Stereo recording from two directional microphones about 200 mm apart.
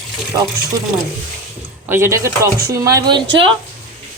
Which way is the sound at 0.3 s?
15° right (ahead or behind).